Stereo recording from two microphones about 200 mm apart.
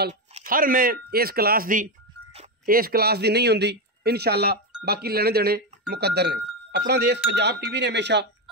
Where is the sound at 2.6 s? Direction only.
50° right (ahead or behind).